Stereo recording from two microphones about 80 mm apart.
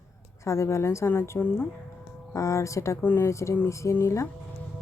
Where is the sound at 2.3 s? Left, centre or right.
Left.